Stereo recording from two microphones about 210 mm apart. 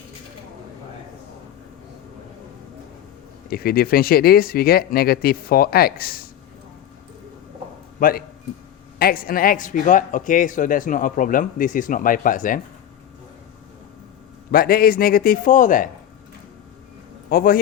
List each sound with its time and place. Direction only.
3.5 s speech: 45° left (ahead or behind)
7.9 s a man's voice: 40° left (ahead or behind)
14.5 s speech: 45° left (ahead or behind)
17.2 s a man's voice: 45° left (ahead or behind)